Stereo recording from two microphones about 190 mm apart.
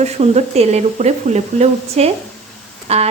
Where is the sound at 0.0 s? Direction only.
35° right (ahead or behind).